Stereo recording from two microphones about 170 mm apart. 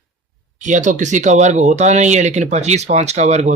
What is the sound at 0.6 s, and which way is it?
Speech, 45° right (ahead or behind).